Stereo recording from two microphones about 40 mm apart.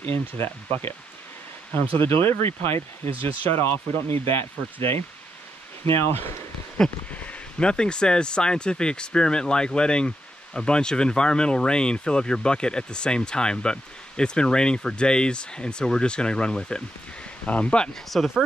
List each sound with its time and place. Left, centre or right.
0.0 s speech: left
7.2 s a sound: left
7.6 s speech: left
17.5 s speech: left
18.1 s speech: centre